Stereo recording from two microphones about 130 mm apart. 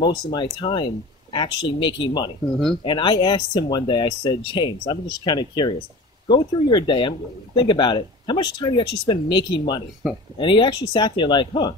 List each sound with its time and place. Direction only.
0.0 s speech: 35° left (ahead or behind)